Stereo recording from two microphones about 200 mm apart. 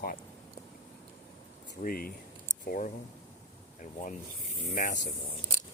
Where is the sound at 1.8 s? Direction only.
45° left (ahead or behind).